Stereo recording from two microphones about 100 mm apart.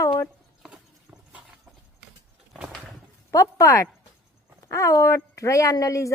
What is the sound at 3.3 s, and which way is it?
Speech, 30° left (ahead or behind).